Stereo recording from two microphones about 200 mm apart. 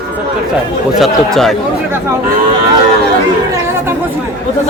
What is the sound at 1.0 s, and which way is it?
Speech, centre (ahead or behind).